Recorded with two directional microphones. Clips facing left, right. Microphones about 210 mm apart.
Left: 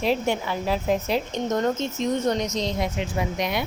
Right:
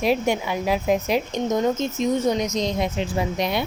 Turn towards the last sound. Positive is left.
turn(degrees=-30)  # may be behind; listen again after turning